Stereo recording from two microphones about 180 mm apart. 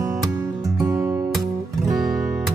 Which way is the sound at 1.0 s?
5° right (ahead or behind).